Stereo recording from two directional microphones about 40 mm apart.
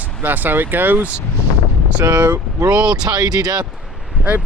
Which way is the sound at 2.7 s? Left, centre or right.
Right.